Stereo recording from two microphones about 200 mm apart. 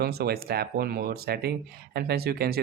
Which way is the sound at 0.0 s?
50° right (ahead or behind).